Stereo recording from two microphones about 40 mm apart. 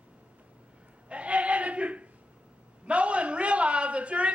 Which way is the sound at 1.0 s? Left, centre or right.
Right.